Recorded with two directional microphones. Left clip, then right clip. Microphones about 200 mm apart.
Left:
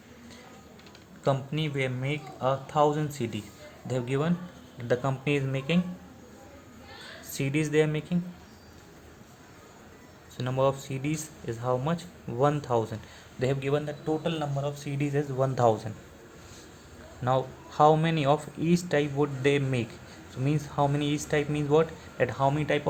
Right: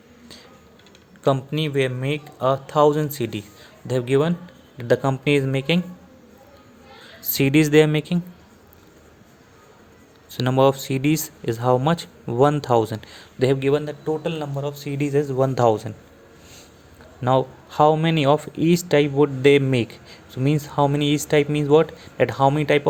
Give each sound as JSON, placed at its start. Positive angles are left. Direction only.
{"t": 1.2, "sound": "speech", "side_deg": -45}
{"t": 7.2, "sound": "speech", "side_deg": -45}
{"t": 10.3, "sound": "speech", "side_deg": -50}
{"t": 17.2, "sound": "speech", "side_deg": -40}